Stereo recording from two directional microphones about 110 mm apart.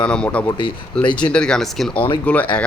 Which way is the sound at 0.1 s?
10° left (ahead or behind).